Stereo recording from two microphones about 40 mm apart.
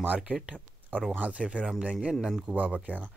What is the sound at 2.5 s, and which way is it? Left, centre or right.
Speech, right.